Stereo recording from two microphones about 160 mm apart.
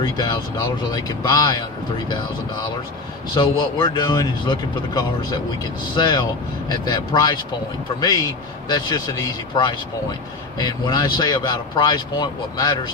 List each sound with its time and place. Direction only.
0.0 s speech: 25° left (ahead or behind)
3.3 s speech: 30° left (ahead or behind)